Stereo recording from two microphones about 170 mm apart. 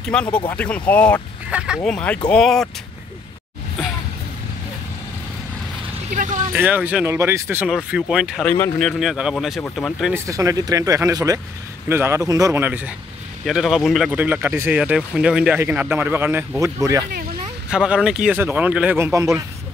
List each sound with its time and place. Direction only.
0.0 s speech: 5° left (ahead or behind)
1.5 s speech: 5° right (ahead or behind)
1.8 s speech: 10° left (ahead or behind)
6.1 s vehicle: 50° right (ahead or behind)
6.5 s speech: 10° right (ahead or behind)
8.5 s speech: 10° left (ahead or behind)
8.8 s speech: 5° right (ahead or behind)
10.1 s speech: 20° right (ahead or behind)
17.6 s speech: 5° right (ahead or behind)